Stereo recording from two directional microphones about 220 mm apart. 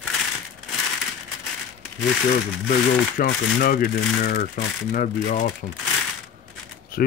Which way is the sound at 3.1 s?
40° left (ahead or behind).